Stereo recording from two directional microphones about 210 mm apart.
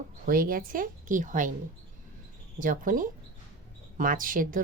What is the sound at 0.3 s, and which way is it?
A woman's voice, 45° right (ahead or behind).